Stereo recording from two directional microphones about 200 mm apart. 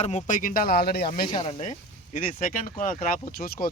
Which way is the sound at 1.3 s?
25° left (ahead or behind).